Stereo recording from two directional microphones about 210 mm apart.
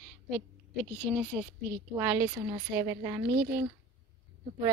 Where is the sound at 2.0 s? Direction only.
10° right (ahead or behind).